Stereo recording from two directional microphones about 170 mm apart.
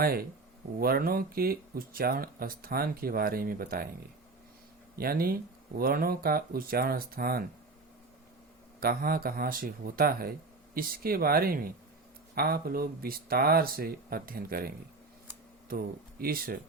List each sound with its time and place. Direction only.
0.0 s speech: 60° right (ahead or behind)
4.9 s speech: 60° right (ahead or behind)
8.8 s speech: 60° right (ahead or behind)
15.7 s speech: 60° right (ahead or behind)